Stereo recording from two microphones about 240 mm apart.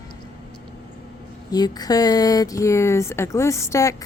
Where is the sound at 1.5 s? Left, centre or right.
Centre.